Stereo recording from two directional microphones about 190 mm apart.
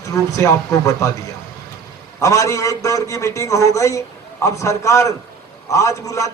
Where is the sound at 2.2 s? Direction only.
15° left (ahead or behind).